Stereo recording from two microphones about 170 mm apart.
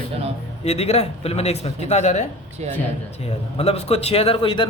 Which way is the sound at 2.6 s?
40° right (ahead or behind).